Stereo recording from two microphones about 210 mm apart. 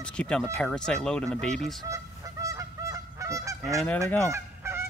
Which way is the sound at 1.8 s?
15° right (ahead or behind).